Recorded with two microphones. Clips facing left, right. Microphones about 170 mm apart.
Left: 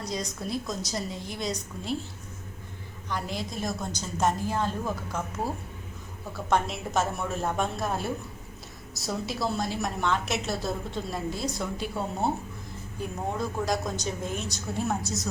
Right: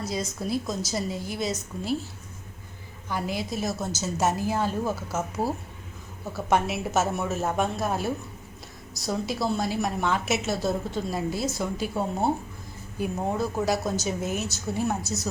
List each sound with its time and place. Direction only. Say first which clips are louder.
0.0 s a woman's voice: right 3 dB; 5° right (ahead or behind)
3.1 s a woman's voice: right 3 dB; 5° right (ahead or behind)
5.4 s speech: right 4 dB; 30° right (ahead or behind)
6.3 s a woman's voice: right 2 dB; 5° right (ahead or behind)
13.0 s a woman's voice: right 4 dB; 5° right (ahead or behind)